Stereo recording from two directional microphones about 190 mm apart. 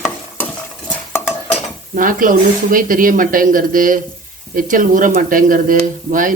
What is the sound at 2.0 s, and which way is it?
Speech, 45° right (ahead or behind).